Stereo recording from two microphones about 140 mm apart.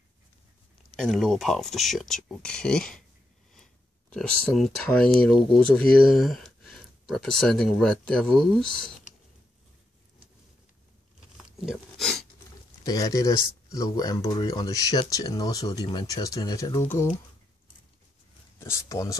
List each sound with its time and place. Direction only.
0.9 s speech: centre (ahead or behind)
4.1 s speech: 5° left (ahead or behind)
11.3 s a sound: centre (ahead or behind)
12.8 s speech: 25° left (ahead or behind)
18.6 s speech: 20° left (ahead or behind)